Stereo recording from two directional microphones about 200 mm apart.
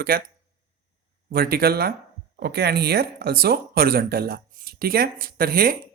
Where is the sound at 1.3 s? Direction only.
50° right (ahead or behind).